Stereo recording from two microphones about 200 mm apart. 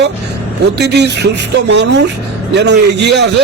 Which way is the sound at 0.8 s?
55° right (ahead or behind).